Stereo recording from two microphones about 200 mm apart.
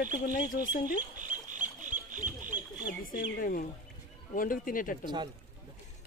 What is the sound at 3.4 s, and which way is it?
Speech, 45° left (ahead or behind).